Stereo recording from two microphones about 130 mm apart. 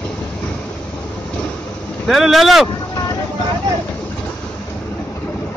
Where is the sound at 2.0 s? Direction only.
Centre (ahead or behind).